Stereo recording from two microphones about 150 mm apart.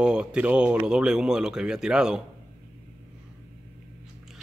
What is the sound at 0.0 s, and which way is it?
Speech, 5° right (ahead or behind).